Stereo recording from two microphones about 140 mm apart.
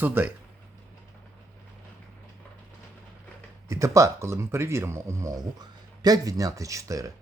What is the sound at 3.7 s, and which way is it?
Speech, 20° right (ahead or behind).